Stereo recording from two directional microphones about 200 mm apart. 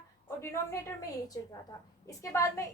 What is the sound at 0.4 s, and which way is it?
A woman's voice, 15° left (ahead or behind).